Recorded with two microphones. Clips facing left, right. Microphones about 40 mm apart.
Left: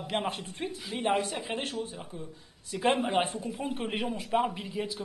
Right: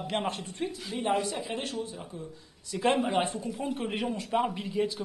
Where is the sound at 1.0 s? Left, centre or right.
Left.